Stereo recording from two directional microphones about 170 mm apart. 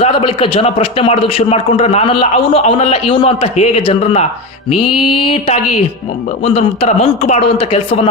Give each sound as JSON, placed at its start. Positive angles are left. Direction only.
{"t": 0.0, "sound": "a man's voice", "side_deg": 30}